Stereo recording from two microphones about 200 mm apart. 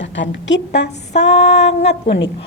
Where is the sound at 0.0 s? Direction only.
65° left (ahead or behind).